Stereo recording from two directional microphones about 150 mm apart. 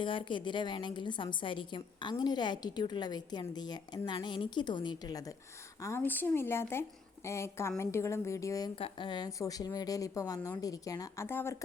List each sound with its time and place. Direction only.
0.0 s a woman's voice: 35° left (ahead or behind)
5.8 s a woman's voice: 15° left (ahead or behind)
8.7 s a woman's voice: 35° left (ahead or behind); by 11.5 s 15° left (ahead or behind)